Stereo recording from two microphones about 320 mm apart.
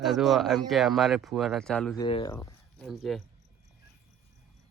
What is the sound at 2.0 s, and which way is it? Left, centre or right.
Speech, centre.